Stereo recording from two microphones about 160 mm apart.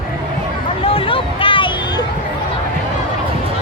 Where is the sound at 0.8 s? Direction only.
35° left (ahead or behind).